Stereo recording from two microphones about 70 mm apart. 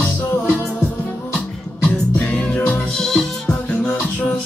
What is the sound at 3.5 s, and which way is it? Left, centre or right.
Music, centre.